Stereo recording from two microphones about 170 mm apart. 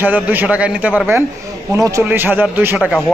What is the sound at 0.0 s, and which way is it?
A man's voice, 10° right (ahead or behind).